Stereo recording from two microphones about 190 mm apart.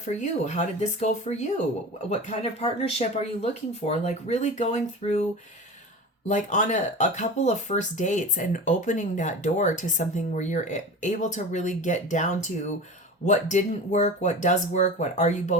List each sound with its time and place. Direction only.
0.0 s speech: 40° left (ahead or behind)
6.2 s speech: 40° left (ahead or behind)